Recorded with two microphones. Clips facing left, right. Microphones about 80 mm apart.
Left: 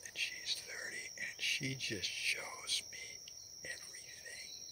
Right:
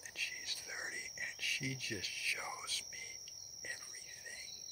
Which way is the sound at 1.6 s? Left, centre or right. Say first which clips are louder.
Even; right.